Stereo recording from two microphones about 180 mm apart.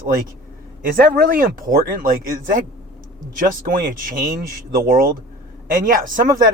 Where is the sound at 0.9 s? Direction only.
55° right (ahead or behind).